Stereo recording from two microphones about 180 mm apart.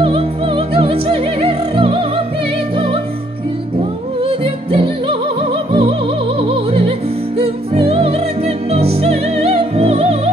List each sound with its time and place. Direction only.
0.0 s music: 30° right (ahead or behind)
4.2 s music: 30° right (ahead or behind)